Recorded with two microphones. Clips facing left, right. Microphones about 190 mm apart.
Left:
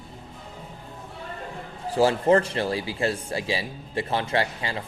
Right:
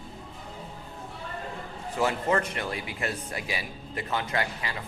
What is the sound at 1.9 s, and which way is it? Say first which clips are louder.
A man's voice: left 7 dB; 30° left (ahead or behind).